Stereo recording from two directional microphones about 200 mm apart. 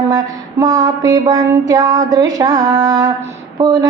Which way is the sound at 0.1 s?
20° right (ahead or behind).